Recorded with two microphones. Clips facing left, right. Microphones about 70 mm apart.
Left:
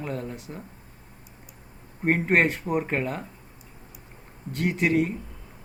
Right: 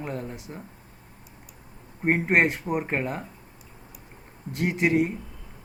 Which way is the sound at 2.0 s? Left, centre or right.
Centre.